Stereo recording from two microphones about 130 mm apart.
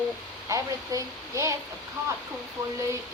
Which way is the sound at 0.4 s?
25° right (ahead or behind).